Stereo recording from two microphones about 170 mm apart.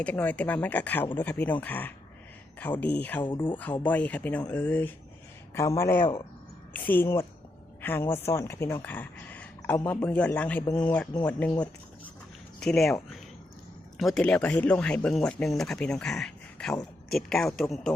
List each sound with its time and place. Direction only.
0.0 s speech: 10° left (ahead or behind)
12.5 s speech: 5° left (ahead or behind)
14.0 s speech: 5° left (ahead or behind)